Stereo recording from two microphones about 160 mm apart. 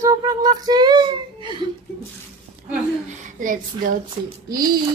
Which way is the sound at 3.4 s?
55° right (ahead or behind).